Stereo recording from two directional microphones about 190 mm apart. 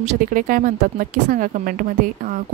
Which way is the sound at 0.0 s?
45° right (ahead or behind).